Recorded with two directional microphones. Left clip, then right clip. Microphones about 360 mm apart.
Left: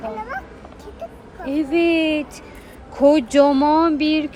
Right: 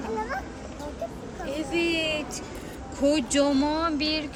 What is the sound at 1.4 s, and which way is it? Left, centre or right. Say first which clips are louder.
Speech: left 9 dB; centre.